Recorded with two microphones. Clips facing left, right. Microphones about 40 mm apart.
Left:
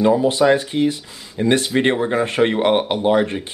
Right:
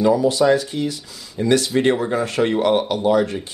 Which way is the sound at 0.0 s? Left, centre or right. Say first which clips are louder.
Left 1 dB; left.